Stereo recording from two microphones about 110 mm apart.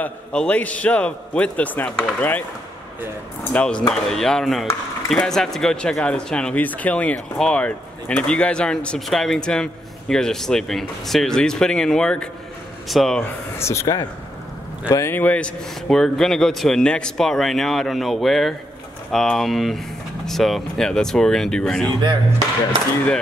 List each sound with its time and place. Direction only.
0.0 s a man's voice: 10° left (ahead or behind)
3.5 s a man's voice: 10° left (ahead or behind)
13.6 s speech: 25° left (ahead or behind); by 21.9 s 5° left (ahead or behind)